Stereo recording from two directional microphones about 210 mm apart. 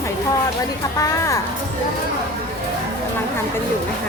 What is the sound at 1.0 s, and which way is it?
Speech, 15° left (ahead or behind).